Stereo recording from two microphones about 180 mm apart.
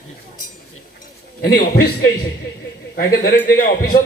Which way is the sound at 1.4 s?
55° left (ahead or behind).